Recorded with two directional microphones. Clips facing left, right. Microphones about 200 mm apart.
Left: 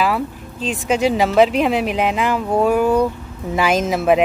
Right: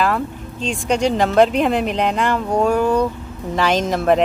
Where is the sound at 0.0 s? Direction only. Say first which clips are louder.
Even; 5° left (ahead or behind).